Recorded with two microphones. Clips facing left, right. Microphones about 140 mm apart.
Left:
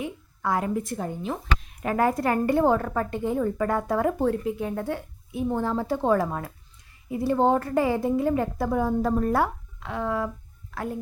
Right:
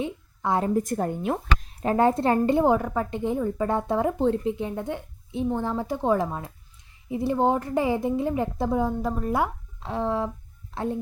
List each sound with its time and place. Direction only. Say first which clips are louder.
0.0 s a sound: right 2 dB; 25° right (ahead or behind)
0.7 s speech: right 4 dB; 45° right (ahead or behind)
1.6 s a woman's voice: right 3 dB; 30° right (ahead or behind); by 9.5 s 15° right (ahead or behind)
9.8 s a woman's voice: right 1 dB; 30° right (ahead or behind)